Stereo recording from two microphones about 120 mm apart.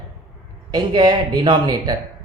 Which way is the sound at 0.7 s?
35° right (ahead or behind).